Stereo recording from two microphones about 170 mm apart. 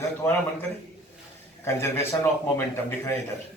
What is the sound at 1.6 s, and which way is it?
A man's voice, 15° left (ahead or behind).